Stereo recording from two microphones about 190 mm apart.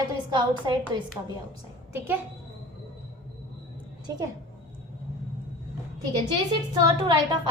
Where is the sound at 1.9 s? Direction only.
10° right (ahead or behind).